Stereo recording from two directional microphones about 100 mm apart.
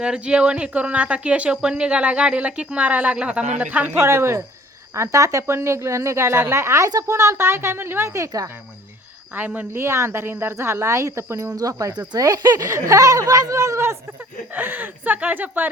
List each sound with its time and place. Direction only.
0.0 s a woman's voice: 10° right (ahead or behind); by 8.4 s 35° right (ahead or behind)
9.3 s a woman's voice: 15° right (ahead or behind)
14.5 s a woman's voice: 20° right (ahead or behind)